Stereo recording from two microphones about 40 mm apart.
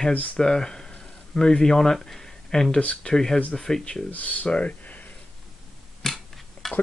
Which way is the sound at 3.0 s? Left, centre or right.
Centre.